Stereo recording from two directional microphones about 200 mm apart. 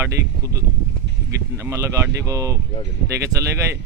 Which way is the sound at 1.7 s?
15° right (ahead or behind).